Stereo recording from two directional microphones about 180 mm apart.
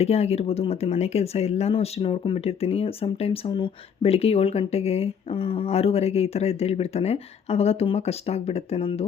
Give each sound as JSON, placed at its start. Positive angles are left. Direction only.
{"t": 0.0, "sound": "speech", "side_deg": 35}